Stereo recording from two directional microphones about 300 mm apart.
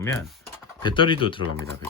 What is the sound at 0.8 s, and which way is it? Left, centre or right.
Speech, centre.